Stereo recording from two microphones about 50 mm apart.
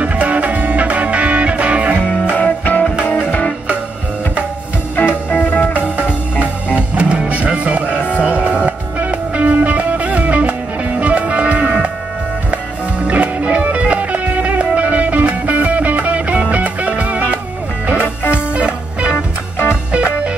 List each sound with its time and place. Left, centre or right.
0.0 s music: right
2.3 s music: left
4.9 s music: left
6.4 s music: right
13.0 s music: right
18.0 s music: left
18.5 s music: right
19.1 s music: left
19.9 s music: right